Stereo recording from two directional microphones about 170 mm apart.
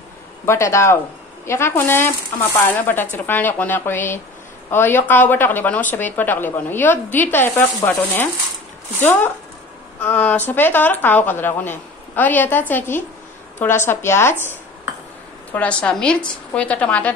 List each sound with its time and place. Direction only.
0.5 s speech: 15° left (ahead or behind)